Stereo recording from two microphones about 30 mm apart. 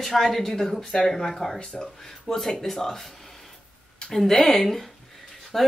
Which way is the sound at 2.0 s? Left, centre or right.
Centre.